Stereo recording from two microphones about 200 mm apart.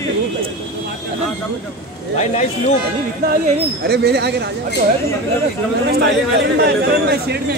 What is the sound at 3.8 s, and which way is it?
Speech, 55° right (ahead or behind).